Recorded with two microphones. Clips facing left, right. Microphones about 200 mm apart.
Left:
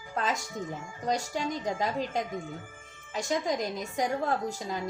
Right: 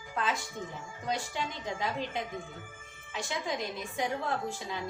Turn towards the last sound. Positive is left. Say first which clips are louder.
# left 3 dB
turn(degrees=40)  # may be behind; listen again after turning